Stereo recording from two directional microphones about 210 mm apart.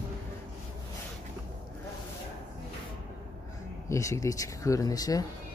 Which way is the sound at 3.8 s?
15° left (ahead or behind).